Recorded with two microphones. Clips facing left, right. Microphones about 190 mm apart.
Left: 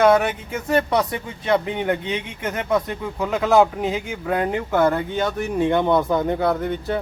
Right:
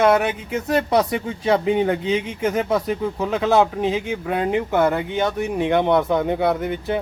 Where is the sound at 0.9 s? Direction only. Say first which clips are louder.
Right 3 dB; 25° right (ahead or behind).